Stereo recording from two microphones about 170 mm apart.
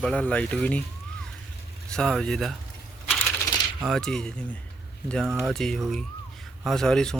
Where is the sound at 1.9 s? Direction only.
5° left (ahead or behind).